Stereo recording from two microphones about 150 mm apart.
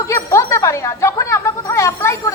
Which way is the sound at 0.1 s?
20° left (ahead or behind).